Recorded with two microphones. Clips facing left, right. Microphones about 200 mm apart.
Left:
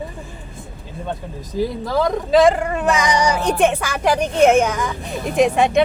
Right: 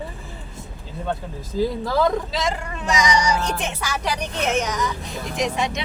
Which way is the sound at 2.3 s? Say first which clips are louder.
Left 12 dB; 55° left (ahead or behind).